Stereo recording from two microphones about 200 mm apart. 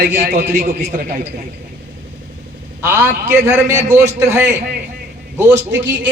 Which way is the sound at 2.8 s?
10° right (ahead or behind).